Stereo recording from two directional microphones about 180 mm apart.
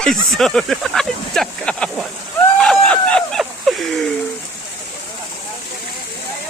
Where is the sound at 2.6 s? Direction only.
5° left (ahead or behind).